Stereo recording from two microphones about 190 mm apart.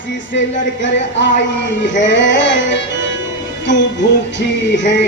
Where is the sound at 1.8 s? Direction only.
70° left (ahead or behind).